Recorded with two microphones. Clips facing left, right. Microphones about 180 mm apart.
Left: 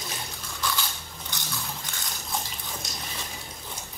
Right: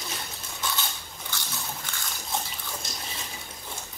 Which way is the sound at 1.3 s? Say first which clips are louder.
Right 1 dB; 20° left (ahead or behind).